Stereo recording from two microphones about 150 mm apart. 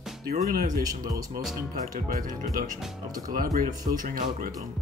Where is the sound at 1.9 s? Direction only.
70° right (ahead or behind).